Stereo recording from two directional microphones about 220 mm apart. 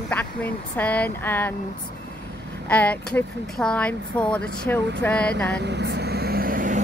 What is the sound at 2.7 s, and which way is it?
Speech, 5° left (ahead or behind).